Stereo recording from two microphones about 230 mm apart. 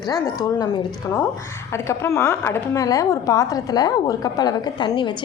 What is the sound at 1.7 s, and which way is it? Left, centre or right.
A woman's voice, centre.